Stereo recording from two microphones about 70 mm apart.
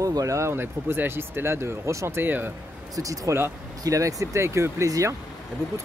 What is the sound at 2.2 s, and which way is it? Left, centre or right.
Speech, right.